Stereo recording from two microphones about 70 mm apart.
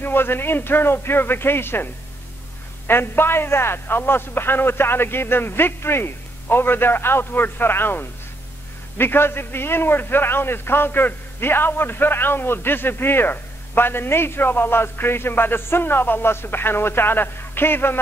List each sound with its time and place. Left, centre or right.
0.0 s a man's voice: left
2.9 s a man's voice: left